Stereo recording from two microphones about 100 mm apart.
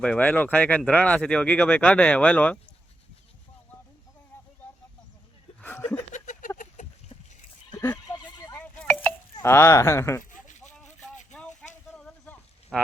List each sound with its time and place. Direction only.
0.0 s speech: 10° left (ahead or behind)
5.5 s chuckle: 15° left (ahead or behind)
8.0 s neigh: 40° left (ahead or behind)
8.5 s a sound: 15° left (ahead or behind)
9.4 s speech: 25° left (ahead or behind)
10.3 s a sound: 5° left (ahead or behind)
12.7 s speech: 5° left (ahead or behind)